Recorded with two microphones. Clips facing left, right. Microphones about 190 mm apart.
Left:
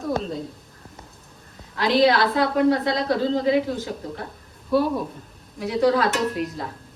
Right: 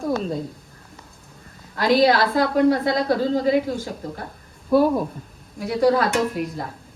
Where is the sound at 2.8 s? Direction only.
50° right (ahead or behind).